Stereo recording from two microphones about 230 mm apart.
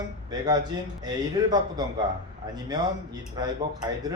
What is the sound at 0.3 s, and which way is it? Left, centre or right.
Speech, centre.